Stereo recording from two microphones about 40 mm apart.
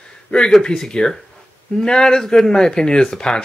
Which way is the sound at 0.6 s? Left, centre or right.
Centre.